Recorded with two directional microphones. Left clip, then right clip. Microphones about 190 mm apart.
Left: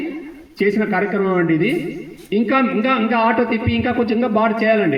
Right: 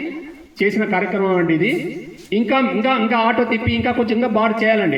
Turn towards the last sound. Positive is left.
turn(degrees=35)  # may be behind; listen again after turning